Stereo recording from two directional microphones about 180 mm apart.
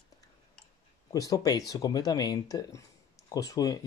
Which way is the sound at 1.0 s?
20° left (ahead or behind).